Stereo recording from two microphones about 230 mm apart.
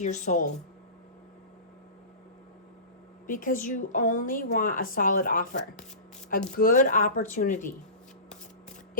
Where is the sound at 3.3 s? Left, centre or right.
Left.